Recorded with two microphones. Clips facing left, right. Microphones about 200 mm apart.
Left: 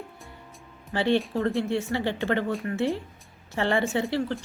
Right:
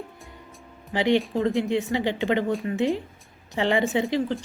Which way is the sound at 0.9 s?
15° right (ahead or behind).